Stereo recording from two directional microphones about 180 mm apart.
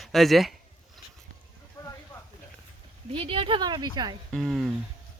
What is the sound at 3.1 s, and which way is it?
A woman's voice, 30° right (ahead or behind).